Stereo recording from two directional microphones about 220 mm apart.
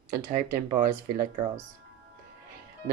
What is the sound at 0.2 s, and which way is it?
Speech, 40° right (ahead or behind).